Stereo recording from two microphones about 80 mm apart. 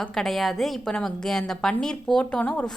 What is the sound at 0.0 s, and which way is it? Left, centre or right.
A woman's voice, centre.